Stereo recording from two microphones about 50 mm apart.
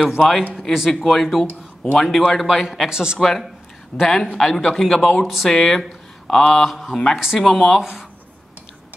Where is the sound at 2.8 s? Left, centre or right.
Centre.